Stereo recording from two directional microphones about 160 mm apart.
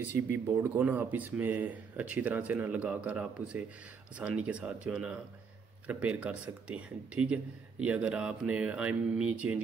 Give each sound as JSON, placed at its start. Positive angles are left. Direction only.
{"t": 0.5, "sound": "speech", "side_deg": -10}